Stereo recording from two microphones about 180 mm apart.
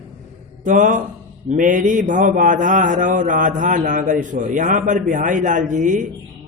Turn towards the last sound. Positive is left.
turn(degrees=-45)  # may be behind; listen again after turning